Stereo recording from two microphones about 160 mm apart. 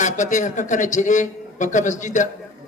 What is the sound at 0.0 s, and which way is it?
A man's voice, 50° left (ahead or behind).